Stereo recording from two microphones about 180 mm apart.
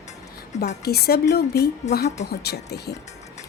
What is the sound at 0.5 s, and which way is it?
Speech, 40° left (ahead or behind).